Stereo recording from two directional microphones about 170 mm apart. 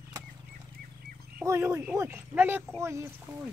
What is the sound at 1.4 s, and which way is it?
Speech, 15° right (ahead or behind).